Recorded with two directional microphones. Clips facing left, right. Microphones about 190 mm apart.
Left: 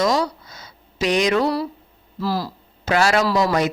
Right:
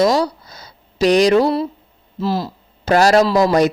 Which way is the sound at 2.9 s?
40° right (ahead or behind).